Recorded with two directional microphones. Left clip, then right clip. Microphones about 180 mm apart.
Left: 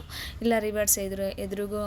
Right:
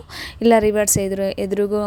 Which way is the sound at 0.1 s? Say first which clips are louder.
Right 11 dB; 45° right (ahead or behind).